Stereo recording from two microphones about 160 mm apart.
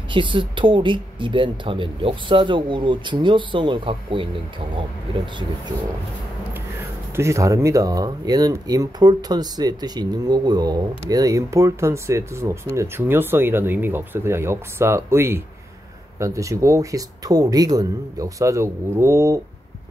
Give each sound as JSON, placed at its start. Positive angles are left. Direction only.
{"t": 0.1, "sound": "speech", "side_deg": -30}
{"t": 7.2, "sound": "speech", "side_deg": -20}